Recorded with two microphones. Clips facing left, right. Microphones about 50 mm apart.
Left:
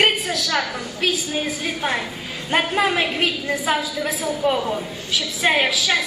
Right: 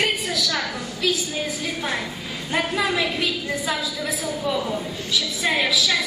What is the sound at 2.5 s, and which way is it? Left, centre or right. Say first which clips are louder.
A woman's voice: left 3 dB; left.